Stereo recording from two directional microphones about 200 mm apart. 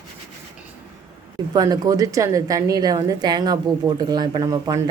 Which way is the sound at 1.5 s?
20° right (ahead or behind).